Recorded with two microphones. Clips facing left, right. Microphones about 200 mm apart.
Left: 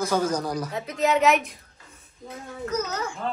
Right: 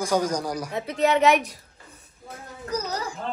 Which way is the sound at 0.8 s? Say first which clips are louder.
Right 2 dB; 30° right (ahead or behind).